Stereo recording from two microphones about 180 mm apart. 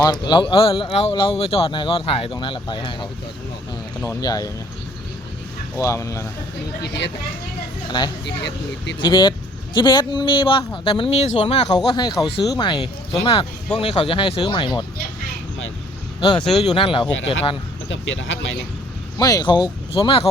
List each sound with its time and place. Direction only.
0.0 s speech: 25° left (ahead or behind)
5.7 s speech: 15° left (ahead or behind)
6.8 s speech: 70° left (ahead or behind)
8.2 s speech: 70° left (ahead or behind)
9.0 s speech: 25° left (ahead or behind)
16.2 s speech: 30° left (ahead or behind)
17.8 s speech: 90° left
19.2 s speech: 20° left (ahead or behind)